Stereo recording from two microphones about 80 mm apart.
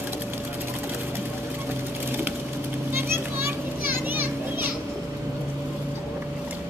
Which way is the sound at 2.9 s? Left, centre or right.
Right.